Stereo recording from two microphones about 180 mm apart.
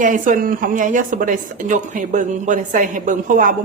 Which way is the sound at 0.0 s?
45° right (ahead or behind).